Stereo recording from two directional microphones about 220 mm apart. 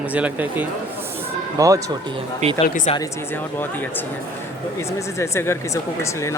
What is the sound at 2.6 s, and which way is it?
Speech, 35° left (ahead or behind).